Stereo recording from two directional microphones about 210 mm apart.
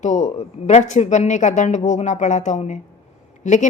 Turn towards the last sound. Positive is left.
turn(degrees=35)  # may be behind; listen again after turning